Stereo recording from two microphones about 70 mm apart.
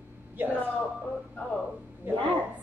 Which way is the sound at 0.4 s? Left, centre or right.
Right.